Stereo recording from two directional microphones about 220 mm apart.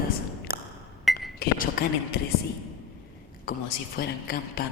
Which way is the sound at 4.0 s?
45° left (ahead or behind).